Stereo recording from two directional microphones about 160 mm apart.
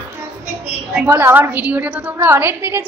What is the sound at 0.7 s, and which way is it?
A woman's voice, 15° right (ahead or behind).